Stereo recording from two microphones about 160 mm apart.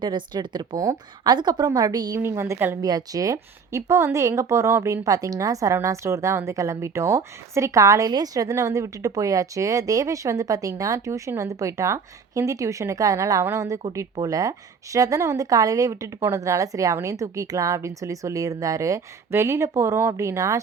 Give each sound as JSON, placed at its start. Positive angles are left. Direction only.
{"t": 0.0, "sound": "speech", "side_deg": -30}